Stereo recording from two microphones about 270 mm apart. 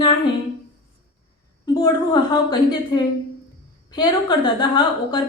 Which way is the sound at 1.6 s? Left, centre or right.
Centre.